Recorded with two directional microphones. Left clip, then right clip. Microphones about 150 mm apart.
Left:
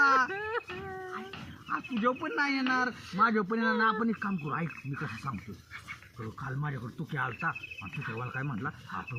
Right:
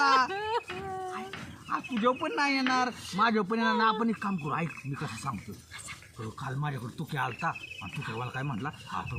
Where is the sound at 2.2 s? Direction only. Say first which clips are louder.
Right 2 dB; 10° right (ahead or behind).